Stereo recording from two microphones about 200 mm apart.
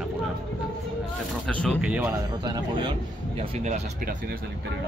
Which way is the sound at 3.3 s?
30° right (ahead or behind).